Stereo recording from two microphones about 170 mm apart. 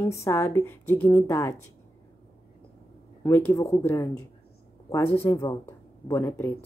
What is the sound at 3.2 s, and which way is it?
Speech, 10° left (ahead or behind).